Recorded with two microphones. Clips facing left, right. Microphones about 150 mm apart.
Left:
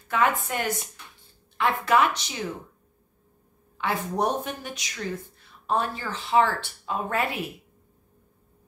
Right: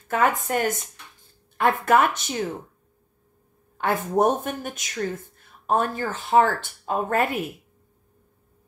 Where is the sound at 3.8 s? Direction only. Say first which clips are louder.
Right 5 dB; 50° right (ahead or behind).